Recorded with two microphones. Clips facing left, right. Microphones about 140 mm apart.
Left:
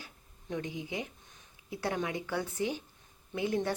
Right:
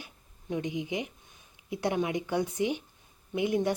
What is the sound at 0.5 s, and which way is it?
Speech, 20° right (ahead or behind).